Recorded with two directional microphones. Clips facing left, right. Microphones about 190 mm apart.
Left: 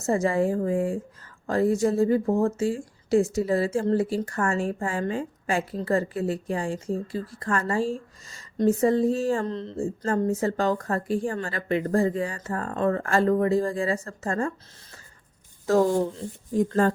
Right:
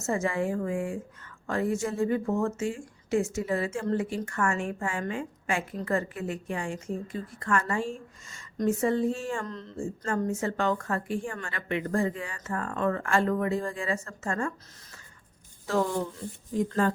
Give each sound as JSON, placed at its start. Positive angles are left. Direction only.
{"t": 0.0, "sound": "speech", "side_deg": 35}
{"t": 15.6, "sound": "speech", "side_deg": 40}
{"t": 15.9, "sound": "speech", "side_deg": 30}
{"t": 16.8, "sound": "speech", "side_deg": 45}